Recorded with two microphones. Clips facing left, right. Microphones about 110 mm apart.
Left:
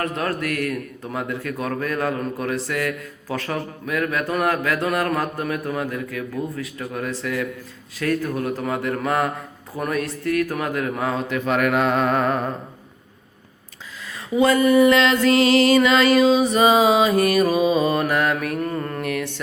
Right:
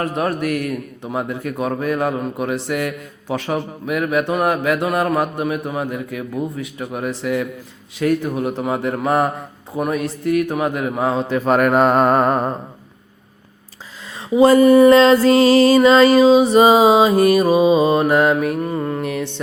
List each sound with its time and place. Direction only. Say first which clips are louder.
0.0 s a man's voice: right 4 dB; 30° right (ahead or behind)
9.9 s mantra: right 3 dB; 25° right (ahead or behind)
14.3 s mantra: right 6 dB; 30° right (ahead or behind); by 19.0 s 15° right (ahead or behind)
19.0 s a man's voice: right 2 dB; 30° right (ahead or behind)